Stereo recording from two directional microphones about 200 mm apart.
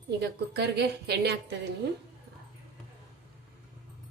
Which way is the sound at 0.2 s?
55° right (ahead or behind).